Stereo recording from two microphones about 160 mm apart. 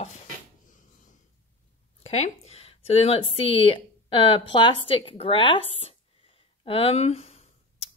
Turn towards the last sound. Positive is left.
turn(degrees=40)  # may be behind; listen again after turning